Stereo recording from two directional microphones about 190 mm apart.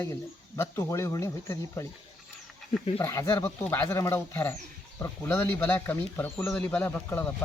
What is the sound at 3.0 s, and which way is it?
Speech, 15° left (ahead or behind).